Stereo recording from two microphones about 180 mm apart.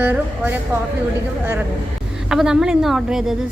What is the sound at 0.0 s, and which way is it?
Speech, 10° right (ahead or behind).